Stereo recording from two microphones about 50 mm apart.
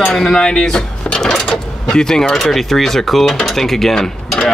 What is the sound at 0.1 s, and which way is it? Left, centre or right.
Speech, centre.